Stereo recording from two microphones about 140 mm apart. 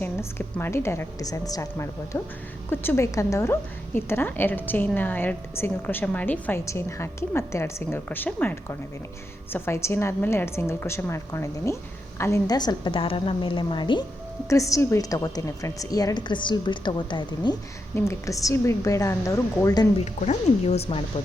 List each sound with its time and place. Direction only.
0.0 s a woman's voice: 15° left (ahead or behind); by 14.0 s 35° left (ahead or behind)
14.5 s a woman's voice: 20° left (ahead or behind)
17.9 s a woman's voice: 20° left (ahead or behind)
20.1 s speech: 55° left (ahead or behind)